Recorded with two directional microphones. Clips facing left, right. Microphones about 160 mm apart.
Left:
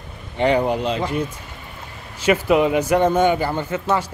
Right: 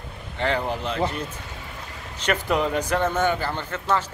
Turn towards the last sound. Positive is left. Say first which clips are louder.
# left 4 dB
turn(degrees=10)  # may be behind; listen again after turning